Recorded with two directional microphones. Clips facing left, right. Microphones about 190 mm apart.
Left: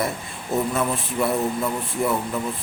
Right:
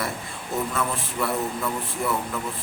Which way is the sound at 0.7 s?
20° left (ahead or behind).